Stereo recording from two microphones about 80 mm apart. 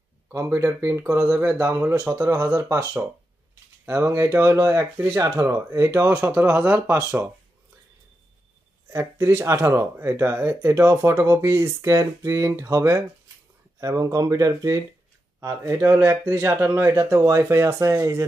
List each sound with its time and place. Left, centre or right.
0.6 s speech: right
1.2 s speech: centre
1.6 s speech: right
2.3 s speech: right
3.8 s speech: right
5.2 s speech: right
6.1 s speech: right
8.9 s speech: right
15.4 s speech: right